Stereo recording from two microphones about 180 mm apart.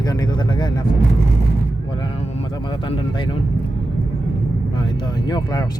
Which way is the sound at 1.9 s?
25° left (ahead or behind).